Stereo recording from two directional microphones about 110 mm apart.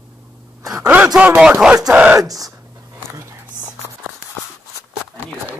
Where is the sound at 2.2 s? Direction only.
30° right (ahead or behind).